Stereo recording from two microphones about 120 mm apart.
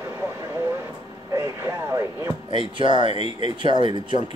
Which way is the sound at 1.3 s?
25° right (ahead or behind).